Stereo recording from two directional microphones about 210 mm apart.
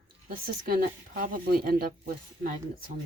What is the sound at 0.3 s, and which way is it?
Speech, 45° right (ahead or behind).